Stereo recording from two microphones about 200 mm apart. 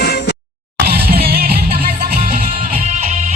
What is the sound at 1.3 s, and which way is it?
Music, 50° right (ahead or behind).